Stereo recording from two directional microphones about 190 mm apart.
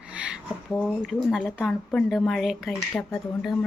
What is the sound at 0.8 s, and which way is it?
Speech, centre (ahead or behind).